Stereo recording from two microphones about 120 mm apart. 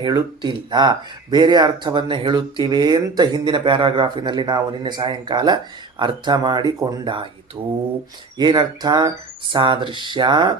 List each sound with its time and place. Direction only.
0.0 s speech: 35° right (ahead or behind)